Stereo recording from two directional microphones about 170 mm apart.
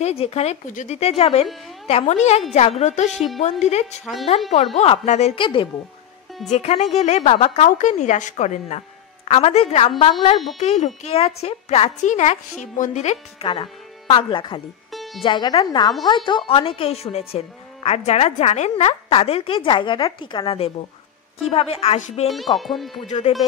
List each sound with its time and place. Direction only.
0.0 s a woman's voice: 35° left (ahead or behind)
4.0 s speech: centre (ahead or behind)
4.7 s a woman's voice: 40° left (ahead or behind)
6.5 s a woman's voice: 40° left (ahead or behind)
14.9 s music: centre (ahead or behind)
15.2 s a woman's voice: 30° left (ahead or behind)
22.3 s speech: centre (ahead or behind)
23.0 s a woman's voice: 45° left (ahead or behind)